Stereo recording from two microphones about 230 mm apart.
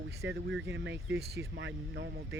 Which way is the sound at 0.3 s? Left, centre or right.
Right.